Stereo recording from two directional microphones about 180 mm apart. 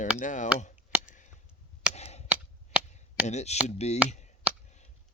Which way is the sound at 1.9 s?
35° left (ahead or behind).